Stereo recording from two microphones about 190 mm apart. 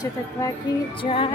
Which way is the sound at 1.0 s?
30° left (ahead or behind).